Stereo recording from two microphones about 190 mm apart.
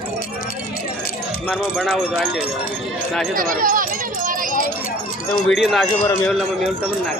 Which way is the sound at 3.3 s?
45° right (ahead or behind).